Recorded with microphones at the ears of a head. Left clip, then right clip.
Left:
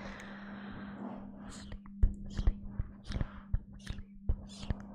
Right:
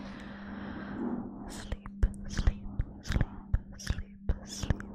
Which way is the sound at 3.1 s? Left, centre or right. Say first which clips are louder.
Right 7 dB; right.